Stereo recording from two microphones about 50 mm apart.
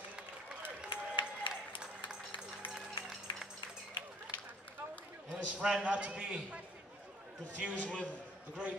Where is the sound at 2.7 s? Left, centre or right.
Centre.